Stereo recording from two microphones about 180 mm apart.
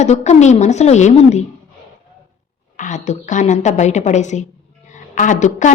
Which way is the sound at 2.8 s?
40° left (ahead or behind).